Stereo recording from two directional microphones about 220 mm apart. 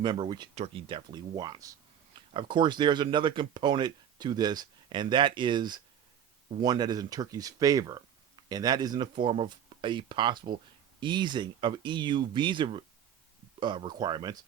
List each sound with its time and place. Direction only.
0.0 s speech: 20° right (ahead or behind)